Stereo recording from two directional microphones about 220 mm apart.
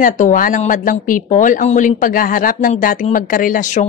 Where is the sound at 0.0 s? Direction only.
40° left (ahead or behind).